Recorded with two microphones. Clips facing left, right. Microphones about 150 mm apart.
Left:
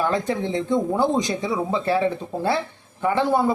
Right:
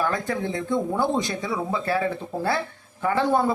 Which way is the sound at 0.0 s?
20° left (ahead or behind).